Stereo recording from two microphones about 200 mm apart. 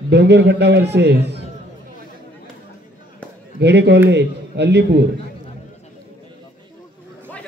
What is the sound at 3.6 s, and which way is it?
A man's voice, 60° right (ahead or behind).